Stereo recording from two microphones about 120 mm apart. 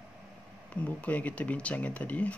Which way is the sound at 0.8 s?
10° left (ahead or behind).